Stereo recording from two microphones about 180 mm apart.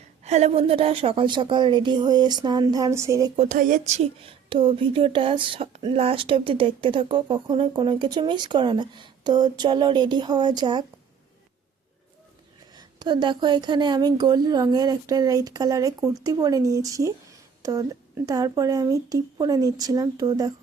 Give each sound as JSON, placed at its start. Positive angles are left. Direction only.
{"t": 0.3, "sound": "speech", "side_deg": -35}
{"t": 3.3, "sound": "speech", "side_deg": -45}
{"t": 12.7, "sound": "speech", "side_deg": -25}